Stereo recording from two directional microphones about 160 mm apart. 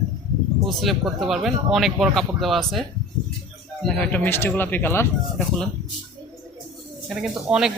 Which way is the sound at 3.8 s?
10° left (ahead or behind).